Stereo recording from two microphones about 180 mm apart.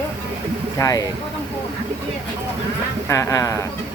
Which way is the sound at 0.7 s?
20° left (ahead or behind).